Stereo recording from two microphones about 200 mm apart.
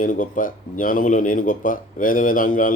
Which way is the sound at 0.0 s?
40° left (ahead or behind).